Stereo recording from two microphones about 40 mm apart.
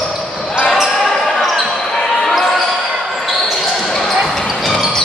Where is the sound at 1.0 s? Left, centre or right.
Centre.